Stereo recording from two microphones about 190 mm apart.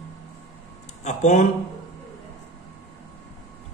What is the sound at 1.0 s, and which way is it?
Speech, 40° left (ahead or behind).